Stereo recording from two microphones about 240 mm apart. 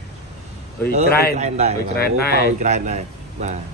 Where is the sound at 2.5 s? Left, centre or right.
Right.